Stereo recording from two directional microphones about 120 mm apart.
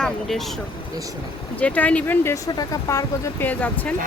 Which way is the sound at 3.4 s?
15° left (ahead or behind).